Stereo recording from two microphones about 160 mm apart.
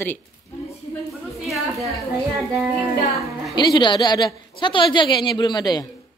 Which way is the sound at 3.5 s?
25° left (ahead or behind).